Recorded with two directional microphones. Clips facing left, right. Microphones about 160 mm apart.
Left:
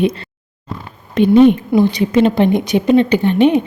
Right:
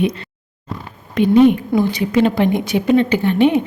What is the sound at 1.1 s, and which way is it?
A woman's voice, 25° left (ahead or behind).